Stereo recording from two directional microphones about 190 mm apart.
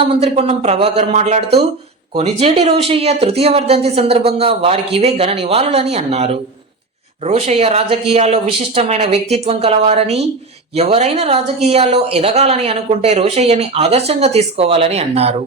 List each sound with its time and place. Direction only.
0.0 s speech: 30° right (ahead or behind)